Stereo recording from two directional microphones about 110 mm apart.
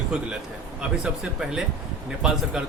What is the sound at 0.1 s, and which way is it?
Speech, 5° right (ahead or behind).